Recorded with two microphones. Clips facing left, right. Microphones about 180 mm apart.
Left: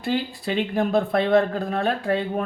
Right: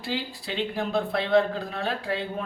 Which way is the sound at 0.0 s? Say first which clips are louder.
Left 7 dB; 50° left (ahead or behind).